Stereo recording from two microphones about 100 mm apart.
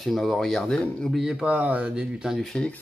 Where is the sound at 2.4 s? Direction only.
5° left (ahead or behind).